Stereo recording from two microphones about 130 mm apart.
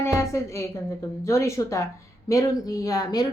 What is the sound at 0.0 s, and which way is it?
A woman's voice, 20° left (ahead or behind).